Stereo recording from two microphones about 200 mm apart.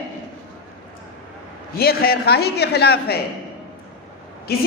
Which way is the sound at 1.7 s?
50° left (ahead or behind).